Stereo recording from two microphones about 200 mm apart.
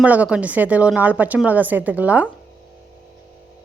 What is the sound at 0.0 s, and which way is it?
A woman's voice, 5° right (ahead or behind).